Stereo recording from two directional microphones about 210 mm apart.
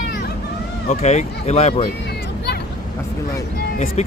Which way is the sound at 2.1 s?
50° left (ahead or behind).